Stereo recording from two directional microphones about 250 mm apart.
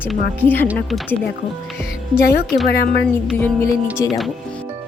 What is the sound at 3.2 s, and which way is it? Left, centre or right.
Speech, centre.